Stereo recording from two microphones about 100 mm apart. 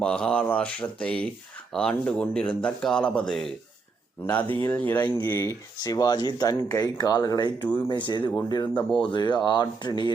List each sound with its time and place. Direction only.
0.0 s a man's voice: 10° left (ahead or behind)
4.5 s a man's voice: 15° left (ahead or behind)
5.8 s speech: 40° left (ahead or behind)
7.6 s speech: 20° left (ahead or behind)
7.9 s speech: 50° left (ahead or behind)
8.7 s a man's voice: 10° left (ahead or behind)
9.0 s speech: 50° left (ahead or behind)